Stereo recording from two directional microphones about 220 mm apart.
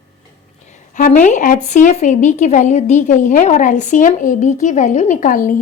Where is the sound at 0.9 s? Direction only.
35° left (ahead or behind).